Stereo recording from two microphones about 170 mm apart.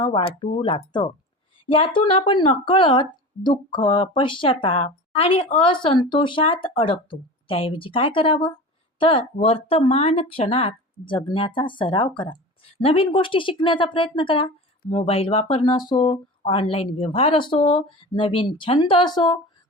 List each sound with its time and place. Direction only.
0.0 s a woman's voice: 30° left (ahead or behind)